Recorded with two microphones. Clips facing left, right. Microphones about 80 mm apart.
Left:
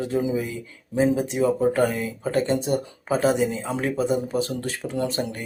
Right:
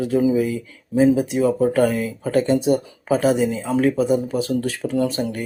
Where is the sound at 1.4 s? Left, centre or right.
Centre.